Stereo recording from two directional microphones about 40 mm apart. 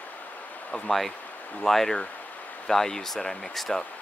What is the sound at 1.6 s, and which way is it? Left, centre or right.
Speech, centre.